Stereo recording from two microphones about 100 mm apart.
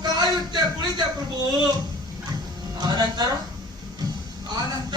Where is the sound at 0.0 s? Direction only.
45° right (ahead or behind).